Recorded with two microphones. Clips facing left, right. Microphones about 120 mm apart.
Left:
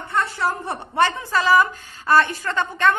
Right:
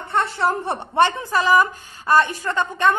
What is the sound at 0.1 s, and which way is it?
A woman's voice, 25° right (ahead or behind).